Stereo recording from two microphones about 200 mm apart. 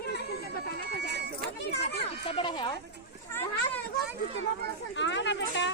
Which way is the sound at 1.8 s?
30° left (ahead or behind).